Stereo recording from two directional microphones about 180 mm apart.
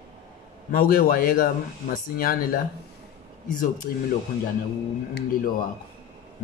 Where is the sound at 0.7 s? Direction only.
55° left (ahead or behind).